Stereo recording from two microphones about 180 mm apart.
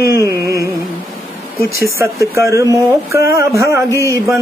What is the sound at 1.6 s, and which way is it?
Speech, 55° left (ahead or behind).